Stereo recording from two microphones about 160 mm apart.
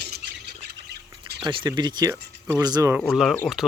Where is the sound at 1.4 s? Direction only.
30° right (ahead or behind).